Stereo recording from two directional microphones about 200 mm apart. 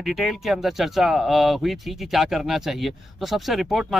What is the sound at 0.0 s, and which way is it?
Speech, centre (ahead or behind).